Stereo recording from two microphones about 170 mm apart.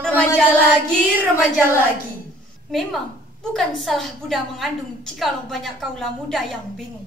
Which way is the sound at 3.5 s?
Centre (ahead or behind).